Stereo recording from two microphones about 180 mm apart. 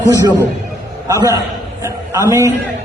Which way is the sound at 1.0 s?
15° right (ahead or behind).